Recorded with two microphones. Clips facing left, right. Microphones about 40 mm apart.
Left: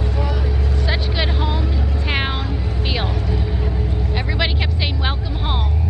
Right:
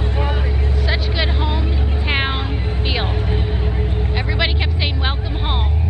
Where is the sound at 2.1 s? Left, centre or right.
Centre.